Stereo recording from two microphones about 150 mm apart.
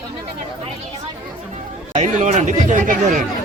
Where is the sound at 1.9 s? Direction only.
50° right (ahead or behind).